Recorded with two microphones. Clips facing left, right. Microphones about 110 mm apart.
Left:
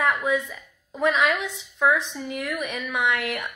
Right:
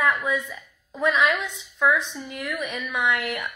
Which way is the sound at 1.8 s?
30° left (ahead or behind).